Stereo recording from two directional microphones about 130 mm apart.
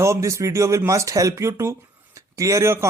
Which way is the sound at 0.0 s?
20° right (ahead or behind).